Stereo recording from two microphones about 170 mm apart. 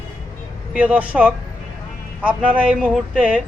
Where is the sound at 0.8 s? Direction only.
10° right (ahead or behind).